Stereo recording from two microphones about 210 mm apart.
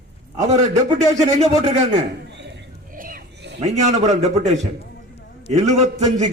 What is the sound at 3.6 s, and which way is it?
A man's voice, 35° right (ahead or behind).